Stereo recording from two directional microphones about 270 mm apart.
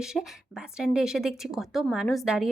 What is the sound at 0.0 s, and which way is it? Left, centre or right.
A woman's voice, centre.